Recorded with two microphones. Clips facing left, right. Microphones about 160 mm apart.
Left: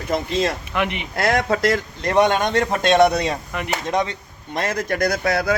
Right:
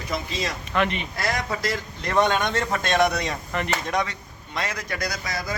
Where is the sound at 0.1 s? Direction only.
55° left (ahead or behind).